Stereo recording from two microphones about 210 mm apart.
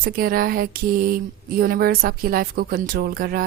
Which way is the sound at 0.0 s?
45° right (ahead or behind).